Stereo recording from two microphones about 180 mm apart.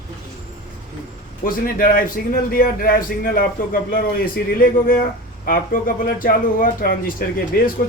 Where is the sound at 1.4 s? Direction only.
50° left (ahead or behind).